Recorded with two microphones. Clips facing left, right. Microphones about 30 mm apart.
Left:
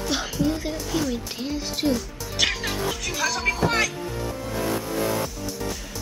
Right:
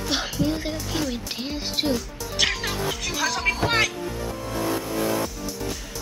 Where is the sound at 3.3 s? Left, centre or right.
Centre.